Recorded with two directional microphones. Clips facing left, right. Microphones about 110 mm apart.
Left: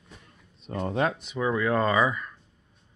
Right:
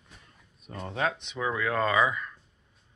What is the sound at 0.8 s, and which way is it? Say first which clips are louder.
Speech: left 3 dB; 40° left (ahead or behind).